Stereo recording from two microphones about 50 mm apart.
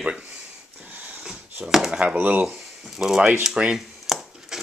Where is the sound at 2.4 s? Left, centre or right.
Centre.